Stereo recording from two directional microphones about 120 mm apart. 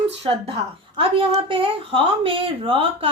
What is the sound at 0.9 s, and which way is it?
A woman's voice, 50° right (ahead or behind).